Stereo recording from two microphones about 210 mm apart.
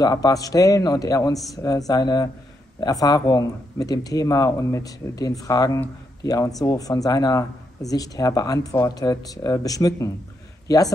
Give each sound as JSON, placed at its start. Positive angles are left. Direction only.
{"t": 0.0, "sound": "speech", "side_deg": 15}